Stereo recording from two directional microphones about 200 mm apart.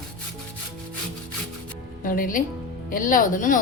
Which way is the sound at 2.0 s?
45° left (ahead or behind).